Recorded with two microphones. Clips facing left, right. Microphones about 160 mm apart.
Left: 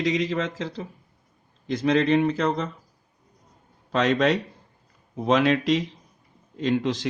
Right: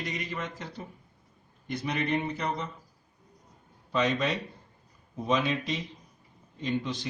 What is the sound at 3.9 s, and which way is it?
Speech, 90° left.